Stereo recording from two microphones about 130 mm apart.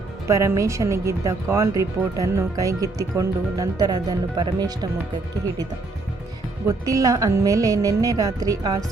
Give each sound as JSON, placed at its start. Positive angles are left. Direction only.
{"t": 0.3, "sound": "speech", "side_deg": -25}
{"t": 6.7, "sound": "speech", "side_deg": -25}